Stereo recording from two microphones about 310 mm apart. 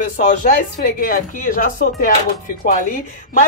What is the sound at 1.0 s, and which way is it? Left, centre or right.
Speech, left.